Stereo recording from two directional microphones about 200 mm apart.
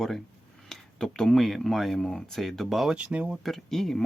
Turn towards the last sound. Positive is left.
turn(degrees=0)  # may be behind; listen again after turning